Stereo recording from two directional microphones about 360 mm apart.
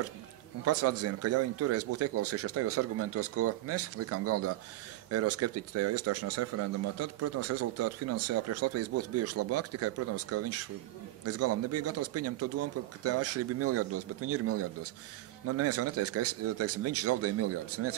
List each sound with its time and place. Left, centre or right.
0.7 s speech: right